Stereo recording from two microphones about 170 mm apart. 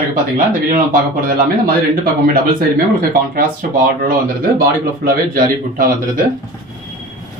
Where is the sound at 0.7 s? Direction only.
55° right (ahead or behind).